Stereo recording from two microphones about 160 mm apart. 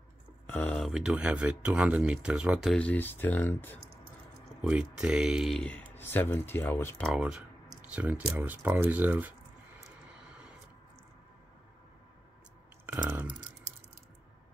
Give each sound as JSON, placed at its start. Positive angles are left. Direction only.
{"t": 0.5, "sound": "speech", "side_deg": 10}
{"t": 4.6, "sound": "speech", "side_deg": -5}
{"t": 7.1, "sound": "speech", "side_deg": -5}
{"t": 12.8, "sound": "clicking", "side_deg": -10}